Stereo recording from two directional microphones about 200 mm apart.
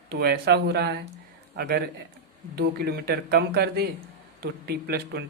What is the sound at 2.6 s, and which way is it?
Speech, 55° right (ahead or behind).